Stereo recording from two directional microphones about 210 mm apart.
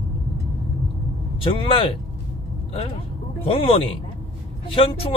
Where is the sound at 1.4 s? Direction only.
25° left (ahead or behind).